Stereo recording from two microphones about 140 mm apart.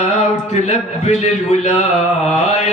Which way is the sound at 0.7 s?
50° left (ahead or behind).